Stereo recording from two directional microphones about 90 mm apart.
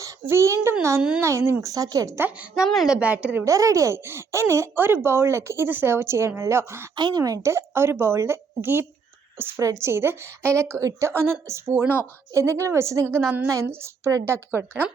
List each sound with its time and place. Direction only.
0.3 s a woman's voice: 30° right (ahead or behind)
1.6 s a woman's voice: 45° right (ahead or behind)
2.6 s a woman's voice: centre (ahead or behind)
3.4 s speech: 35° right (ahead or behind)
6.9 s a woman's voice: 55° right (ahead or behind)
7.2 s a woman's voice: 40° right (ahead or behind)
7.5 s a woman's voice: 30° right (ahead or behind)